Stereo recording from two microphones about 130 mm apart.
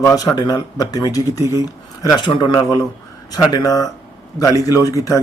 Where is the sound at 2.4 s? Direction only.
30° left (ahead or behind).